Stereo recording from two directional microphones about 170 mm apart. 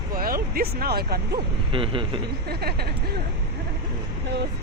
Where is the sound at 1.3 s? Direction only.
30° right (ahead or behind).